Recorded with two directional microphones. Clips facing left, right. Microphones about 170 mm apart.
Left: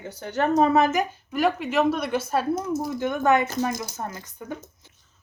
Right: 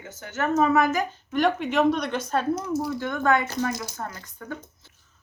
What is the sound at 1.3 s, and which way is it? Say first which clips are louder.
Speech: right 2 dB; 5° left (ahead or behind).